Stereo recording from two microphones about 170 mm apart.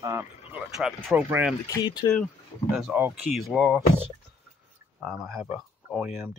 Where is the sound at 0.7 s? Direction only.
Centre (ahead or behind).